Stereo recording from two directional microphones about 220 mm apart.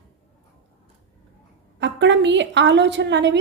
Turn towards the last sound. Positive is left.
turn(degrees=-55)  # may be behind; listen again after turning